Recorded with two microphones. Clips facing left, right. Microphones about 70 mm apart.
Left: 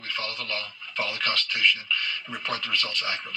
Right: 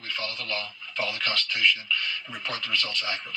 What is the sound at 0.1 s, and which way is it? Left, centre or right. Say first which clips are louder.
Speech: even; left.